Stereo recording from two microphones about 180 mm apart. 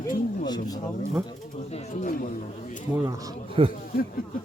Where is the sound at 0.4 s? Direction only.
20° left (ahead or behind).